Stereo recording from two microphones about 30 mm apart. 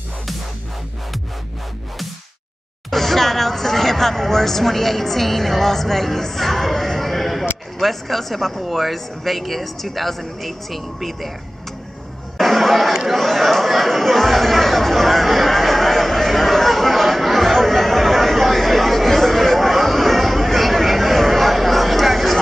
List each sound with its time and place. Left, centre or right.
2.9 s speech: centre
12.4 s a sound: centre
13.1 s chatter: centre